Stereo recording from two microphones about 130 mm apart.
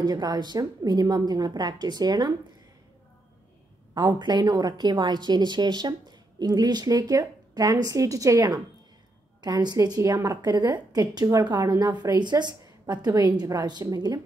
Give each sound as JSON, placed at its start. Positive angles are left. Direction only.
{"t": 0.0, "sound": "a woman's voice", "side_deg": -30}
{"t": 3.9, "sound": "a woman's voice", "side_deg": -35}